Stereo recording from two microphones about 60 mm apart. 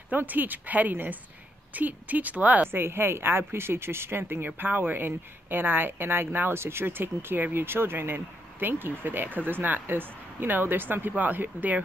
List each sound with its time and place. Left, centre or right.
0.1 s a woman's voice: right
2.7 s speech: right